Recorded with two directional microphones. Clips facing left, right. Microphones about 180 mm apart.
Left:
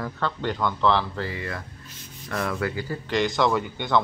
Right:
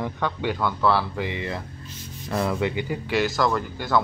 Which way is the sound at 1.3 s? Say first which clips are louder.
Right 3 dB; 25° right (ahead or behind).